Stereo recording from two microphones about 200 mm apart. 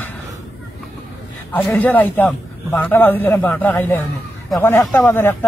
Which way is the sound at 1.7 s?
10° left (ahead or behind).